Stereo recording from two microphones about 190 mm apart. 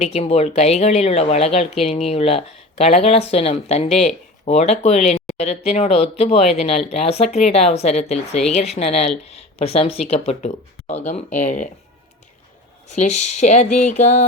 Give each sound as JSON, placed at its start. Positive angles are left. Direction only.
{"t": 0.0, "sound": "speech", "side_deg": 35}
{"t": 12.9, "sound": "speech", "side_deg": 35}